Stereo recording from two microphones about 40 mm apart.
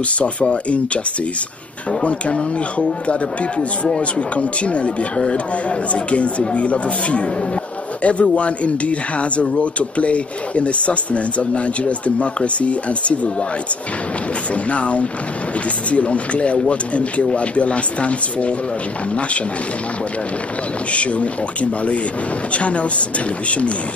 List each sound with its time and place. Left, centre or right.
0.2 s speech: left
14.5 s speech: left
20.9 s speech: left